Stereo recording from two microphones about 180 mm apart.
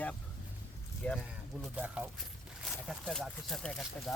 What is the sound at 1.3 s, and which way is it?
Speech, 5° right (ahead or behind).